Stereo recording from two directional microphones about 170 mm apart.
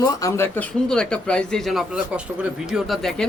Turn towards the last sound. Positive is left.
turn(degrees=0)  # may be behind; listen again after turning